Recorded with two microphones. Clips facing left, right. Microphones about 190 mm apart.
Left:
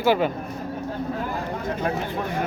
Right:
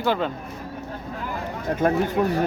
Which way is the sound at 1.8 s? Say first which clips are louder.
Right 7 dB; 45° right (ahead or behind).